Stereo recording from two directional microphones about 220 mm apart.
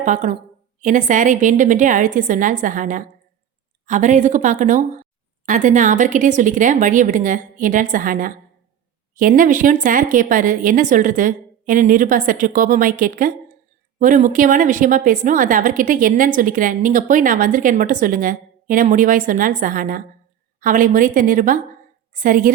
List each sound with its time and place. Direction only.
0.0 s a woman's voice: 35° right (ahead or behind)